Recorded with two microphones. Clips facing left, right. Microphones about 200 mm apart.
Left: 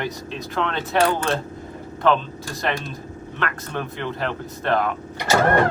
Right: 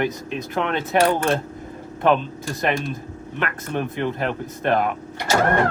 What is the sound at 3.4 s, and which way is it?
Speech, 15° right (ahead or behind).